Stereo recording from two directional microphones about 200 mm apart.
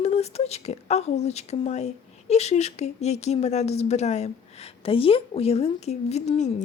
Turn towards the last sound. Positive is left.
turn(degrees=35)  # may be behind; listen again after turning